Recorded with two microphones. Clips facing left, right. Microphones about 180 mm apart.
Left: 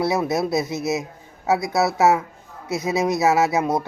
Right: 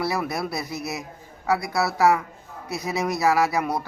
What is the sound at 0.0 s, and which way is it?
Speech, 20° left (ahead or behind).